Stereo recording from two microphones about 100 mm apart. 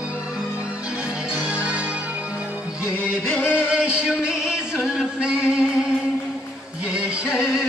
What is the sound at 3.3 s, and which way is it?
Music, 15° left (ahead or behind).